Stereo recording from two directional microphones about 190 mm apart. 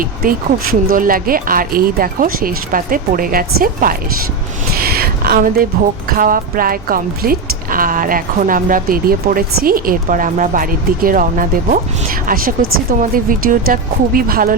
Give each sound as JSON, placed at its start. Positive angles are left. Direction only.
{"t": 0.0, "sound": "speech", "side_deg": -50}